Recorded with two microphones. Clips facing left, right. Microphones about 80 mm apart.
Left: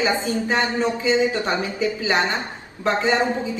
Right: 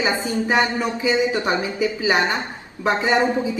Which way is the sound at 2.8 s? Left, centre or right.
Right.